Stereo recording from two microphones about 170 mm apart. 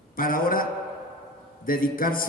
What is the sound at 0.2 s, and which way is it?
A man's voice, 55° left (ahead or behind).